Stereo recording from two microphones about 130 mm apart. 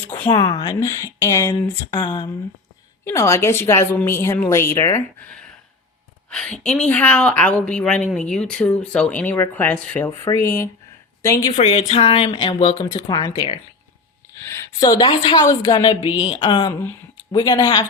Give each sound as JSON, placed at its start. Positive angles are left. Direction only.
{"t": 0.3, "sound": "a woman's voice", "side_deg": 30}
{"t": 6.3, "sound": "a woman's voice", "side_deg": 5}
{"t": 10.2, "sound": "a woman's voice", "side_deg": 25}
{"t": 11.5, "sound": "speech", "side_deg": 50}
{"t": 14.3, "sound": "a woman's voice", "side_deg": 20}